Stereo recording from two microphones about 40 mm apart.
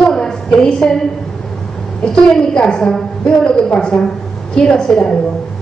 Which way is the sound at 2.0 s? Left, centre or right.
Left.